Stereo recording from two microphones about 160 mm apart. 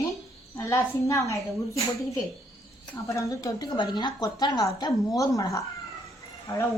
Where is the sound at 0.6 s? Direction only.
20° left (ahead or behind).